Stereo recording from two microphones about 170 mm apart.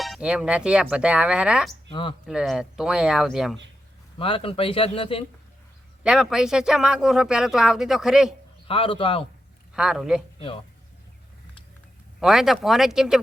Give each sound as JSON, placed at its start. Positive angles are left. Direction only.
{"t": 0.0, "sound": "speech", "side_deg": -5}
{"t": 1.9, "sound": "speech", "side_deg": 30}
{"t": 2.2, "sound": "speech", "side_deg": 0}
{"t": 4.2, "sound": "speech", "side_deg": 30}
{"t": 6.0, "sound": "speech", "side_deg": -5}
{"t": 8.6, "sound": "speech", "side_deg": 30}
{"t": 9.7, "sound": "speech", "side_deg": -5}
{"t": 12.2, "sound": "speech", "side_deg": 0}